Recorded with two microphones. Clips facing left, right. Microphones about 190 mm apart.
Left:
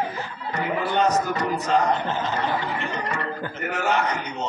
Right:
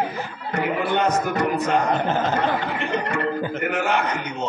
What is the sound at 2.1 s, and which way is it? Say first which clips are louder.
Snicker: right 4 dB; 50° right (ahead or behind).